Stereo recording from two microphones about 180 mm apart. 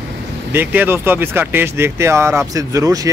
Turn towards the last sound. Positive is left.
turn(degrees=-20)  # may be behind; listen again after turning